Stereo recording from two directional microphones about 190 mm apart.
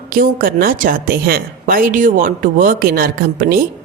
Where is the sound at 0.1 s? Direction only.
50° right (ahead or behind).